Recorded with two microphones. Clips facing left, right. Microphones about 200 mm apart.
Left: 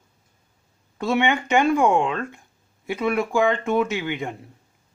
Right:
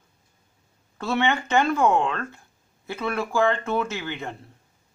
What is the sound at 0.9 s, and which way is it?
Speech, 15° left (ahead or behind).